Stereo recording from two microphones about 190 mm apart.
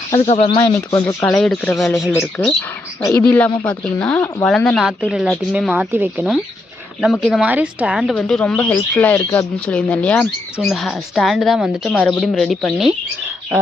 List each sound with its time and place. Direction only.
0.3 s speech: 30° left (ahead or behind)
0.6 s speech: 15° left (ahead or behind)
1.2 s speech: 5° left (ahead or behind)
3.0 s speech: 15° left (ahead or behind); by 12.9 s centre (ahead or behind)